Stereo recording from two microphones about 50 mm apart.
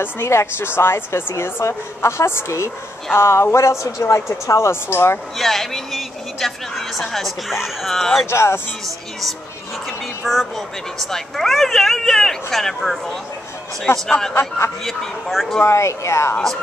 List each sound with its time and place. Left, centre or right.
0.0 s a woman's voice: left
3.5 s speech: left
5.4 s a man's voice: centre
8.3 s a woman's voice: left
9.8 s a woman's voice: centre
13.9 s a woman's voice: left
14.9 s a man's voice: centre
15.6 s speech: left